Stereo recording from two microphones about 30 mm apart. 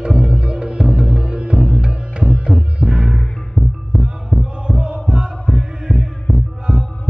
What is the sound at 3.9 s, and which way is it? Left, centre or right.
Heart murmur, right.